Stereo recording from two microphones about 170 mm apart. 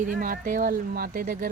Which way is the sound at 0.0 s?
50° right (ahead or behind).